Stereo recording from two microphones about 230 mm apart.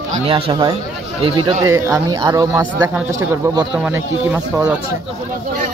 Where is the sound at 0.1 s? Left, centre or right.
Right.